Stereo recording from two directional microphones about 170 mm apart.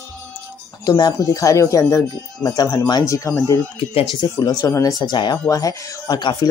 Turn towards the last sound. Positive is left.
turn(degrees=25)  # may be behind; listen again after turning